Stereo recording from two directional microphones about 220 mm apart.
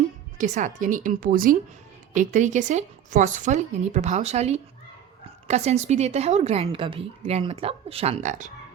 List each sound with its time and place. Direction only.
0.3 s a woman's voice: 35° right (ahead or behind)